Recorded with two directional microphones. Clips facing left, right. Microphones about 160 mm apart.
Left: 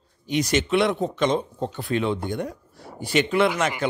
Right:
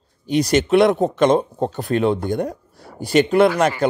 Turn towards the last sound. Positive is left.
turn(degrees=-40)  # may be behind; listen again after turning